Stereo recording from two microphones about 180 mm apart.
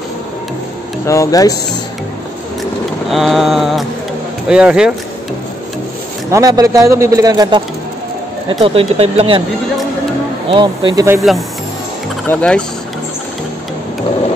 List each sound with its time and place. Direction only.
1.0 s speech: 15° left (ahead or behind)
3.1 s vehicle: centre (ahead or behind)
6.3 s a man's voice: 20° right (ahead or behind)
8.5 s speech: 30° right (ahead or behind)
10.5 s speech: 25° right (ahead or behind)
11.1 s vehicle: centre (ahead or behind)